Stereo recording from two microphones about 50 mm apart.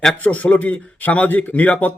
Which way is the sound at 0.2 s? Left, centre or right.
Left.